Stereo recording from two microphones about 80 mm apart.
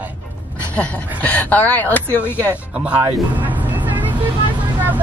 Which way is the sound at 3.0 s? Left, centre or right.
Right.